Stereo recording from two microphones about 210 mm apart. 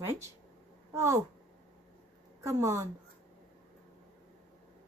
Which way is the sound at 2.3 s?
15° right (ahead or behind).